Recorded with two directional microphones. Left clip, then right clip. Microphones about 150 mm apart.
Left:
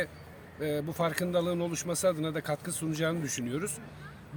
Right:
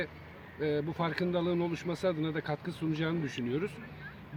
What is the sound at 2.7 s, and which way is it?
Speech, 35° left (ahead or behind).